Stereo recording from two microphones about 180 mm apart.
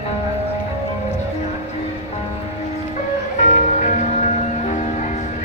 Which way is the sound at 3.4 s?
40° left (ahead or behind).